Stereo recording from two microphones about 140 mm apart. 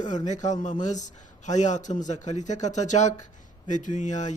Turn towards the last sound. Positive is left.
turn(degrees=60)  # may be behind; listen again after turning